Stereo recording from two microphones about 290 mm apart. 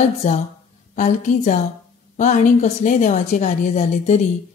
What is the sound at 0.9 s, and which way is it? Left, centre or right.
Speech, left.